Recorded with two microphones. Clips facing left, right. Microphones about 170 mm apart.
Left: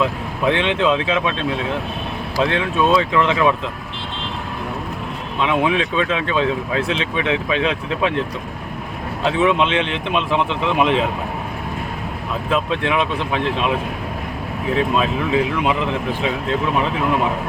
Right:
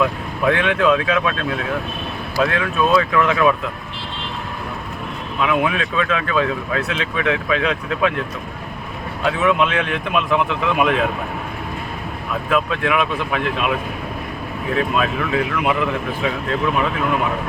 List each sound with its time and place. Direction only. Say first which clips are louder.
0.0 s speech: right 1 dB; 25° left (ahead or behind)
5.4 s speech: left 1 dB; 25° left (ahead or behind)
9.2 s speech: left 1 dB; 30° left (ahead or behind)
12.5 s speech: even; 30° left (ahead or behind)
14.8 s speech: left 1 dB; 25° left (ahead or behind)